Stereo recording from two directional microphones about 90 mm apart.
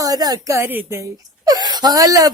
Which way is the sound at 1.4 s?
50° right (ahead or behind).